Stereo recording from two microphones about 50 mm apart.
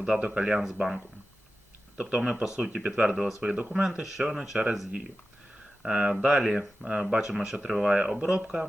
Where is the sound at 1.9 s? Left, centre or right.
Right.